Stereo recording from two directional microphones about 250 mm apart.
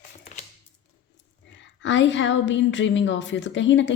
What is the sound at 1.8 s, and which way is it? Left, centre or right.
A woman's voice, left.